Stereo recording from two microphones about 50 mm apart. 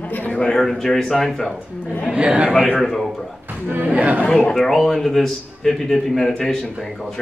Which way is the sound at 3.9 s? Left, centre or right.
Right.